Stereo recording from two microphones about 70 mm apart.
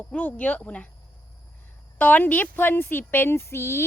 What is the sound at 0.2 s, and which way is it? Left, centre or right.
Speech, left.